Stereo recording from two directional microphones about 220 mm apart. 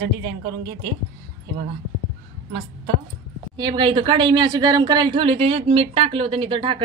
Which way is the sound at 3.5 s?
20° right (ahead or behind).